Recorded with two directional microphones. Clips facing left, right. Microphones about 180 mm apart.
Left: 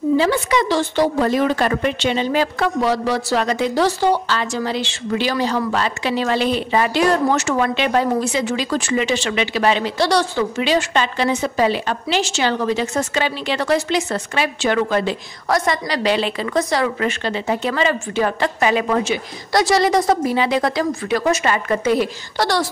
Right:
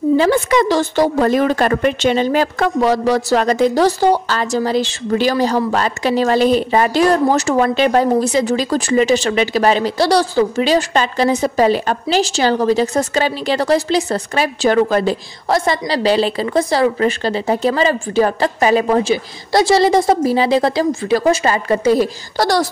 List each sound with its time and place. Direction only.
0.2 s a woman's voice: 50° right (ahead or behind)